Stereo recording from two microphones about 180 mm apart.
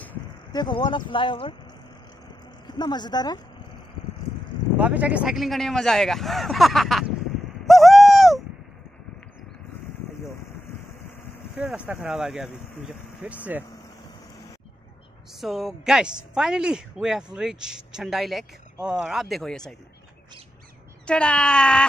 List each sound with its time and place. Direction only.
0.5 s speech: 25° left (ahead or behind)
2.6 s a woman's voice: 25° left (ahead or behind)
4.7 s speech: 10° right (ahead or behind)
7.6 s owl: centre (ahead or behind)
11.5 s speech: 5° right (ahead or behind)
15.4 s speech: centre (ahead or behind)
21.0 s speech: 5° left (ahead or behind)